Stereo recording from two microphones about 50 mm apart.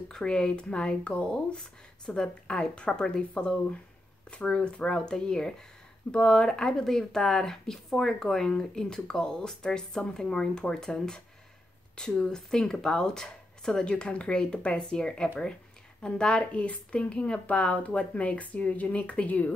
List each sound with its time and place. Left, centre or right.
0.1 s speech: centre